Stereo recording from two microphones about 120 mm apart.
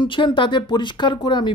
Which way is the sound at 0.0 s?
40° left (ahead or behind).